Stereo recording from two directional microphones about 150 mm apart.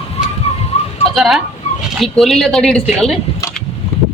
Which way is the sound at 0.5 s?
45° left (ahead or behind).